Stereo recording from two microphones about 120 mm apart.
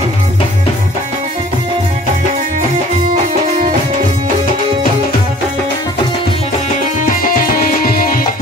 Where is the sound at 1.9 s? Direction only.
85° right.